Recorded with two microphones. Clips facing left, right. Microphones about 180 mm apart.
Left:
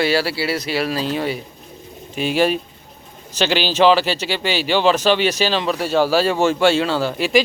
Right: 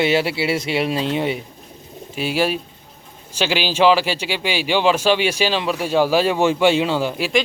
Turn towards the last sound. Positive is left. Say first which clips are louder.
# even
turn(degrees=-10)  # may be behind; listen again after turning